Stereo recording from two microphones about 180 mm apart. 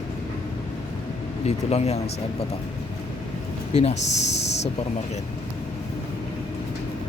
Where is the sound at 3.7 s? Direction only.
35° left (ahead or behind).